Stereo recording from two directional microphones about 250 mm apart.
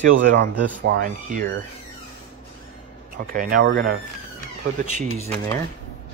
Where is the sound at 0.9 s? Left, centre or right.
Right.